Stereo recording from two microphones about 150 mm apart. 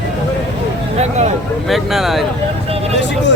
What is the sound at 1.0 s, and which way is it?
Speech, 50° right (ahead or behind).